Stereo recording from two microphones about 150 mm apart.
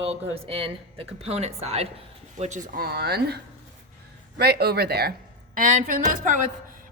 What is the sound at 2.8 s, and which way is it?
Speech, 90° right.